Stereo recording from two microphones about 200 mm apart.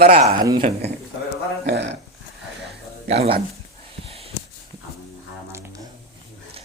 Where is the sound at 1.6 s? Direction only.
60° right (ahead or behind).